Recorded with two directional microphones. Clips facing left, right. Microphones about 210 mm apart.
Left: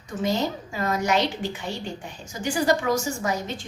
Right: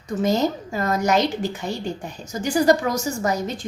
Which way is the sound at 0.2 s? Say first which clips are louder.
Right 4 dB; 45° right (ahead or behind).